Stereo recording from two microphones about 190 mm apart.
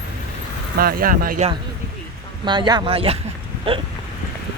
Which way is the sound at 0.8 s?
50° right (ahead or behind).